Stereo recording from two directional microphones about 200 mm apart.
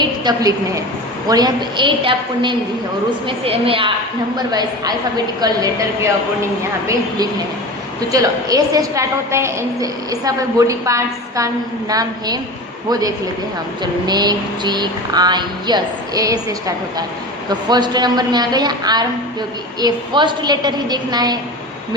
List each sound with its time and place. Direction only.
0.0 s a woman's voice: 20° right (ahead or behind)
8.1 s a woman's voice: 20° right (ahead or behind)